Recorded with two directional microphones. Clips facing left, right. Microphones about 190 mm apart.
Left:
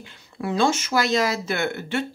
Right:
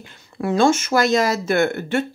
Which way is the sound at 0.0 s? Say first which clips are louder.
Right 4 dB; 45° right (ahead or behind).